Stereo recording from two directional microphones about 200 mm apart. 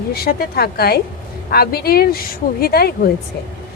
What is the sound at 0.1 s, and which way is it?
Speech, 50° left (ahead or behind).